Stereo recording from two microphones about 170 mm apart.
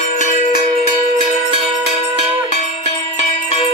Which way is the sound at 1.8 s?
35° left (ahead or behind).